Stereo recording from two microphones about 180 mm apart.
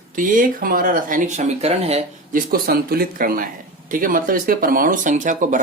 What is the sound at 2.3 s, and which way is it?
Speech, 55° right (ahead or behind).